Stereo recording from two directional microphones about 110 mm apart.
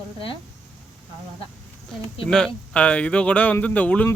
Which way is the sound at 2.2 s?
5° left (ahead or behind).